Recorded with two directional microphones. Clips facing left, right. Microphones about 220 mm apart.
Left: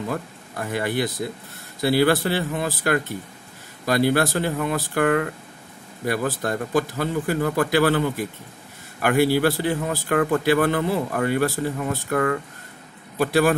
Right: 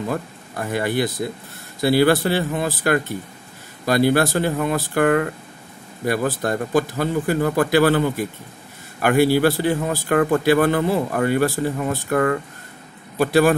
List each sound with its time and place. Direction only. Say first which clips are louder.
0.1 s a man's voice: right 3 dB; 40° right (ahead or behind)
9.0 s a man's voice: right 3 dB; 40° right (ahead or behind)